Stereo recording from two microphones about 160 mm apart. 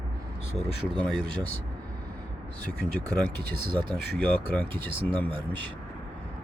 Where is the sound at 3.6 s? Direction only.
30° right (ahead or behind).